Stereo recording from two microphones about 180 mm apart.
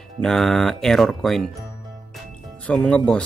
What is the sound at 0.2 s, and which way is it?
Speech, 5° left (ahead or behind).